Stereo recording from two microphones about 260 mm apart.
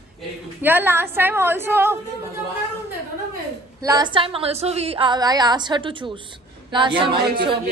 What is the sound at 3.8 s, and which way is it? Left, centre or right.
A woman's voice, centre.